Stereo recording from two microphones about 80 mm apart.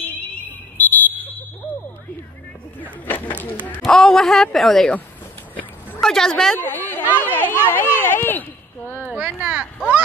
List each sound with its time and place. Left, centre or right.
0.0 s smoke detector: left
1.6 s smoke detector: right
2.8 s vehicle: left
3.8 s speech: centre
5.9 s speech: centre
6.5 s a sound: left
7.2 s a child's voice: left
9.1 s speech: centre